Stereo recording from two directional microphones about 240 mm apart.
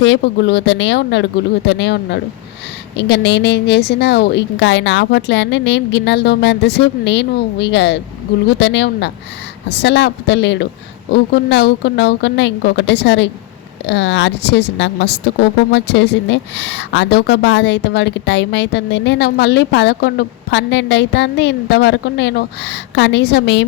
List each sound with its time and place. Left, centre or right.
0.0 s a woman's voice: left